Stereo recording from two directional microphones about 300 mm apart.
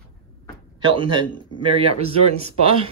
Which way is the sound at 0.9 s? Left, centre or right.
Centre.